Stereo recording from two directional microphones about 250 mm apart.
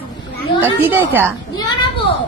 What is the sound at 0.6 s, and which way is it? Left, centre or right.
Speech, centre.